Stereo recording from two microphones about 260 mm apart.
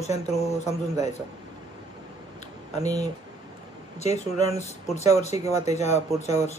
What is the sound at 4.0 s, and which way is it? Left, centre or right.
Speech, left.